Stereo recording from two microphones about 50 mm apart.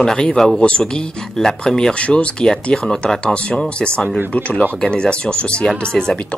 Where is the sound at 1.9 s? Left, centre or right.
Left.